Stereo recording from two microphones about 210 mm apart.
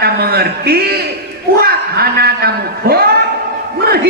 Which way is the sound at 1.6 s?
45° right (ahead or behind).